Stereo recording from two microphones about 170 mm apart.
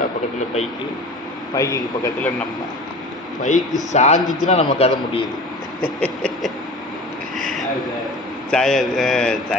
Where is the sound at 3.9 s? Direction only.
40° left (ahead or behind).